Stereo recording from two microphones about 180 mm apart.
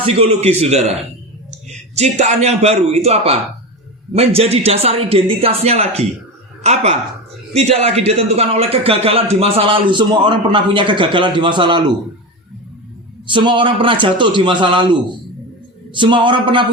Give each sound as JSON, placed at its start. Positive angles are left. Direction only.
{"t": 0.0, "sound": "a man's voice", "side_deg": -35}
{"t": 2.0, "sound": "a man's voice", "side_deg": -40}
{"t": 13.2, "sound": "a man's voice", "side_deg": -25}
{"t": 16.0, "sound": "a man's voice", "side_deg": -25}